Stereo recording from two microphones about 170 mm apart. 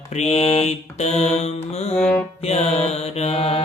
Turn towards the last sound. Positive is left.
turn(degrees=35)  # may be behind; listen again after turning